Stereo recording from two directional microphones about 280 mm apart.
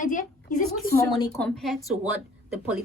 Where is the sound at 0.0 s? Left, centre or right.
Left.